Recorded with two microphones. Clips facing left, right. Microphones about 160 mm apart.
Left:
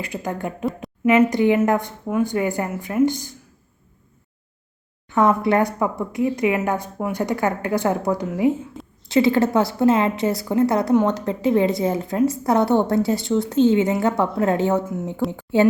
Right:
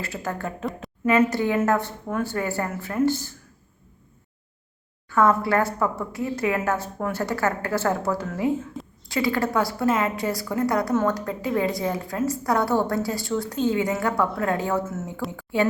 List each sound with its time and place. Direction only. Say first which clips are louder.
0.0 s speech: left 3 dB; 15° left (ahead or behind)
5.0 s a woman's voice: left 2 dB; 20° left (ahead or behind)